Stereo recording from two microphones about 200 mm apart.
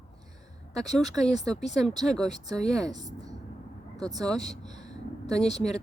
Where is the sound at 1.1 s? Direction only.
Centre (ahead or behind).